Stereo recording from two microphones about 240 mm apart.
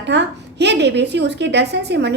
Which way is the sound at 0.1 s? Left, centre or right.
Right.